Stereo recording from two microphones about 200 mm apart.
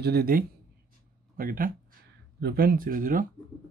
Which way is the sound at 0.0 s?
50° right (ahead or behind).